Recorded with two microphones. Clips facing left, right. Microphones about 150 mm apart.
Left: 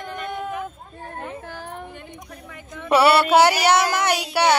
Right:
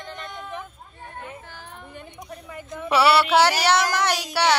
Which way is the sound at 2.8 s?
50° left (ahead or behind).